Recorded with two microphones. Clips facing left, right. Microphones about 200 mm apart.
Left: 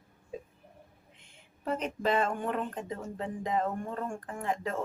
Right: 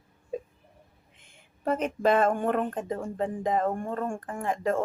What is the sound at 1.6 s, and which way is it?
Speech, 50° right (ahead or behind).